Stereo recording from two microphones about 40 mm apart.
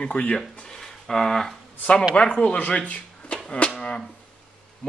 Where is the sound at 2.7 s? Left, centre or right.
Left.